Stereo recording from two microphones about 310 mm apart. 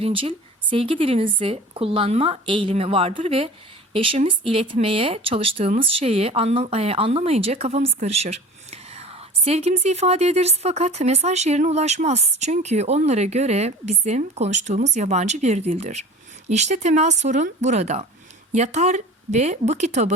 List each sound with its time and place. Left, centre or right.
0.0 s speech: centre